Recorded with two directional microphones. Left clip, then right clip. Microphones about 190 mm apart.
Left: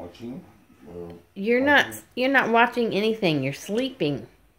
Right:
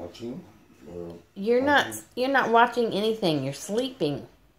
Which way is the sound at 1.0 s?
20° left (ahead or behind).